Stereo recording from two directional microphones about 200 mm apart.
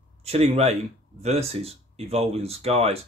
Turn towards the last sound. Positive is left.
turn(degrees=-30)  # may be behind; listen again after turning